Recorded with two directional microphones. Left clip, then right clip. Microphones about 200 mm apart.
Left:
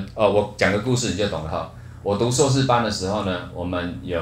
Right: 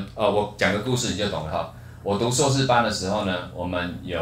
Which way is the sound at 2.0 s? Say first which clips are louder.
Left 2 dB; 20° left (ahead or behind).